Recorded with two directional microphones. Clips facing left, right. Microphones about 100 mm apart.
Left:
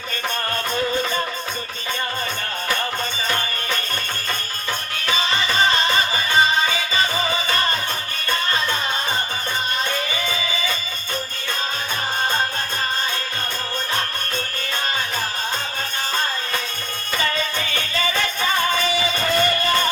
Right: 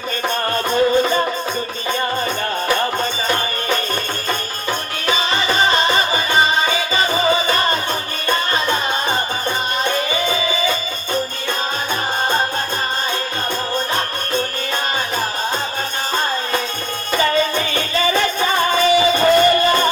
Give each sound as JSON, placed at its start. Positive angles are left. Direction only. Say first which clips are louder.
{"t": 0.5, "sound": "music", "louder": "right 9 dB", "side_deg": -25}
{"t": 2.6, "sound": "music", "louder": "right 5 dB", "side_deg": -30}
{"t": 5.0, "sound": "music", "louder": "right 4 dB", "side_deg": -25}
{"t": 17.1, "sound": "music", "louder": "right 7 dB", "side_deg": -25}